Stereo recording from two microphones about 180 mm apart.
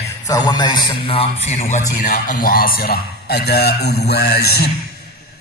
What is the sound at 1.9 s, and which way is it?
A man's voice, 55° left (ahead or behind).